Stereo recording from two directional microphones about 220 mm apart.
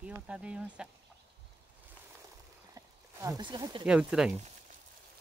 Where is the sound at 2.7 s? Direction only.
15° right (ahead or behind).